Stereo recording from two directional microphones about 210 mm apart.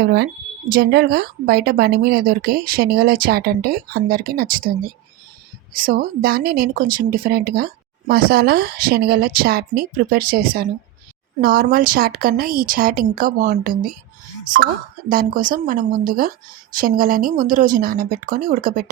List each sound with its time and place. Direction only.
0.0 s speech: 50° right (ahead or behind)
5.7 s speech: 40° right (ahead or behind)
15.1 s speech: 40° right (ahead or behind)